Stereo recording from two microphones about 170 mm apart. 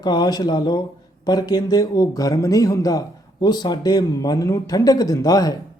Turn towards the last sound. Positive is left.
turn(degrees=20)  # may be behind; listen again after turning